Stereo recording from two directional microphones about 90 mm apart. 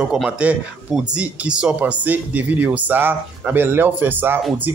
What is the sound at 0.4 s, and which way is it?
Speech, 15° right (ahead or behind).